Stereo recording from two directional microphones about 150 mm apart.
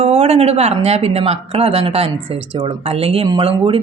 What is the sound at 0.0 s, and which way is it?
Speech, 40° right (ahead or behind).